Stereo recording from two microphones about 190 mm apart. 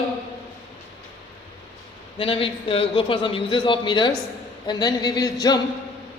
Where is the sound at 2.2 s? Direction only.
30° left (ahead or behind).